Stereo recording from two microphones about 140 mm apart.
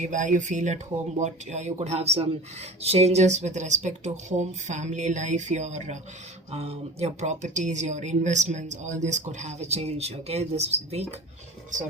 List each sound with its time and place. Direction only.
0.0 s speech: 65° right (ahead or behind); by 11.0 s 50° right (ahead or behind)